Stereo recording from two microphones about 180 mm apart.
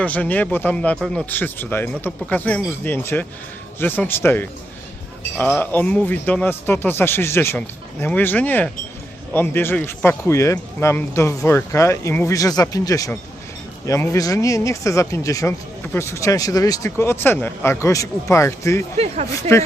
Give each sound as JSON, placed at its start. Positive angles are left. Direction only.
{"t": 0.0, "sound": "speech", "side_deg": 10}
{"t": 18.9, "sound": "speech", "side_deg": -35}
{"t": 19.4, "sound": "speech", "side_deg": 15}